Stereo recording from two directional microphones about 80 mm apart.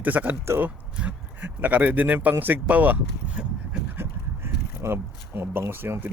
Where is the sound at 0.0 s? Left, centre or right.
Right.